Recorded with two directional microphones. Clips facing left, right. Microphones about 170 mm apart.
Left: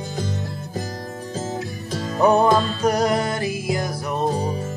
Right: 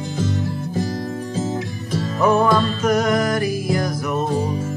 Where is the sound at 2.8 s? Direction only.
35° left (ahead or behind).